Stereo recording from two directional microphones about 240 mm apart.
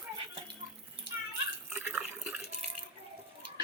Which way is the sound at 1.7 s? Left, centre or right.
Centre.